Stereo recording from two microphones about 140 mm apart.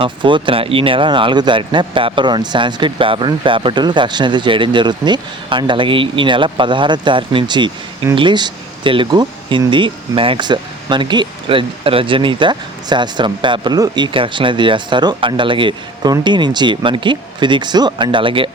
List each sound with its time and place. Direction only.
0.0 s speech: 35° right (ahead or behind)